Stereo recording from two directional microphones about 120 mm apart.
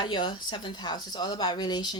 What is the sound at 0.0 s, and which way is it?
A woman's voice, 40° left (ahead or behind).